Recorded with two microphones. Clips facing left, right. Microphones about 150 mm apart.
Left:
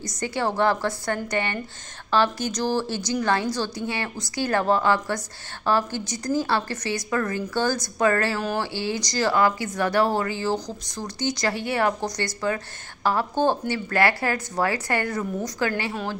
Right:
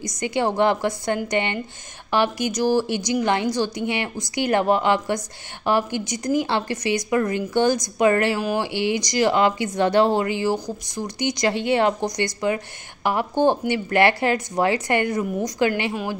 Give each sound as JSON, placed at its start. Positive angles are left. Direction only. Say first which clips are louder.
{"t": 0.0, "sound": "a woman's voice", "louder": "right 3 dB", "side_deg": -20}